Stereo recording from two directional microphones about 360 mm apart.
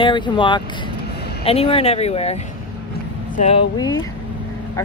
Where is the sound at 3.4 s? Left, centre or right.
Centre.